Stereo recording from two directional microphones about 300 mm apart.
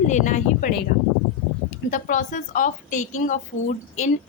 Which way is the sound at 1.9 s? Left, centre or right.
Left.